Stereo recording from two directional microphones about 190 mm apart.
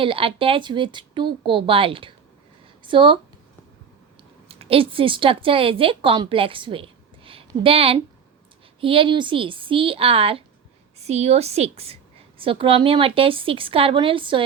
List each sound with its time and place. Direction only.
0.0 s speech: 30° right (ahead or behind)
4.4 s a woman's voice: 30° right (ahead or behind)